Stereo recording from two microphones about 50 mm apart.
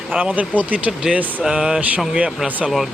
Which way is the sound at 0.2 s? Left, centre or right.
Right.